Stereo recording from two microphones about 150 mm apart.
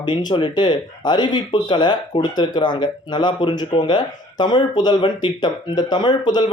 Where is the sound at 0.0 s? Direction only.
30° left (ahead or behind).